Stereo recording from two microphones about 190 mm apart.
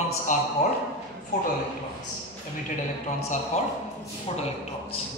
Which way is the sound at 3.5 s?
35° left (ahead or behind).